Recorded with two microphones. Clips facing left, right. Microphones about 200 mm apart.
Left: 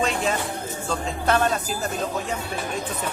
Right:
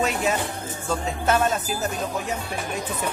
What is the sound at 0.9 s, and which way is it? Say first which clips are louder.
Speech: right 1 dB; 5° right (ahead or behind).